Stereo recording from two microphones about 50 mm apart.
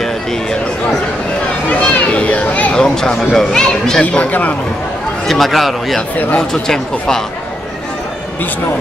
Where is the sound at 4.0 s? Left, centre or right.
Left.